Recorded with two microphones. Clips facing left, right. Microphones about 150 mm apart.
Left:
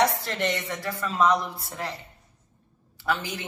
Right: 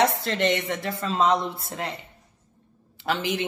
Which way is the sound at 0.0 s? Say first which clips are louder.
Right 2 dB; 20° right (ahead or behind).